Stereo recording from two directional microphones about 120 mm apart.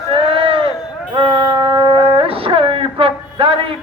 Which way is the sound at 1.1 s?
40° right (ahead or behind).